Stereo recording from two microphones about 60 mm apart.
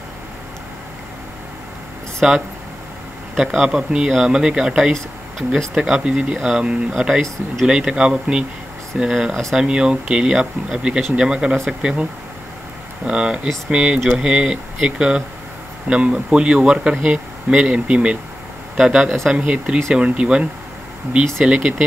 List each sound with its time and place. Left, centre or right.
2.2 s speech: centre